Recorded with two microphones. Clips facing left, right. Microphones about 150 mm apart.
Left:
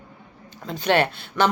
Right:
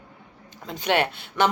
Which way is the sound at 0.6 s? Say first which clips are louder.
Left 3 dB; 15° right (ahead or behind).